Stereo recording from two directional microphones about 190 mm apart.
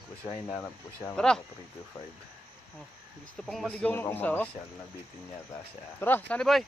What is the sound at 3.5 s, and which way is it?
A man's voice, 5° left (ahead or behind).